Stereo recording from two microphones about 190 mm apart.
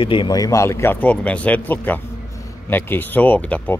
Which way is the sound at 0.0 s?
25° left (ahead or behind).